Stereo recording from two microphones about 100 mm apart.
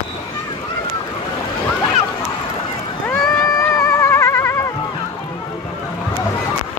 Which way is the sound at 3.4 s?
35° left (ahead or behind).